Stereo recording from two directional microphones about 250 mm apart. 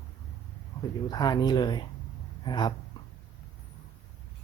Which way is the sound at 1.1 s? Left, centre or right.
Centre.